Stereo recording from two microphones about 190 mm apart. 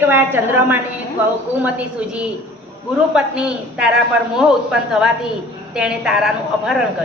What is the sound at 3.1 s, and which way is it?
A woman's voice, 5° right (ahead or behind).